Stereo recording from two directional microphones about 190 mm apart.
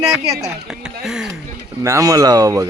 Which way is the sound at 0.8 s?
5° right (ahead or behind).